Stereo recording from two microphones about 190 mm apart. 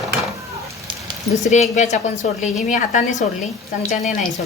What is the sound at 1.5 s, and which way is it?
A woman's voice, 35° left (ahead or behind).